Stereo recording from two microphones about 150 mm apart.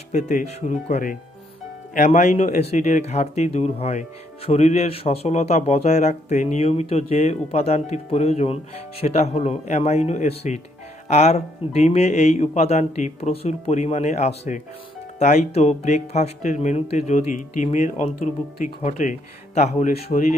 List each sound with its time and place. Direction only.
0.1 s a man's voice: 55° left (ahead or behind)